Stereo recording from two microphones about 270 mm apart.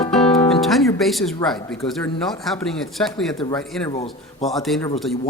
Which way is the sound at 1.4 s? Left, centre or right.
Centre.